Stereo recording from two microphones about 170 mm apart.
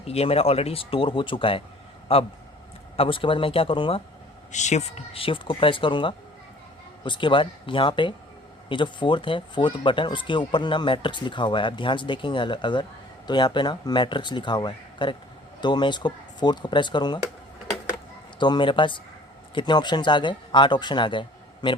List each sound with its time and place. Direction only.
0.0 s speech: 35° left (ahead or behind)
4.5 s speech: 40° left (ahead or behind); by 17.2 s 25° left (ahead or behind)
18.3 s speech: 25° left (ahead or behind)